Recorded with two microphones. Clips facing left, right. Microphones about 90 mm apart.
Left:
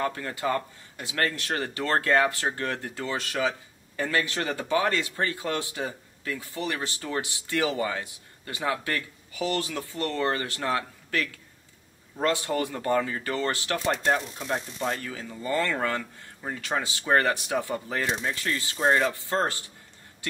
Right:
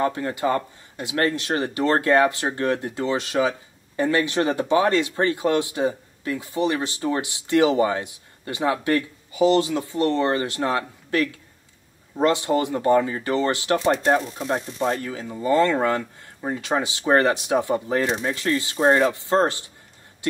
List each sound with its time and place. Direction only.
0.0 s speech: 25° right (ahead or behind)